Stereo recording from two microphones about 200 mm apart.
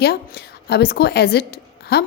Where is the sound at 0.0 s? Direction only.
55° left (ahead or behind).